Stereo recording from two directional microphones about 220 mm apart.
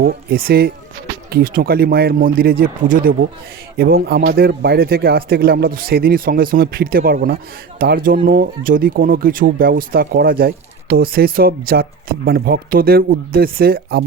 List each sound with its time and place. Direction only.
0.0 s speech: 40° right (ahead or behind)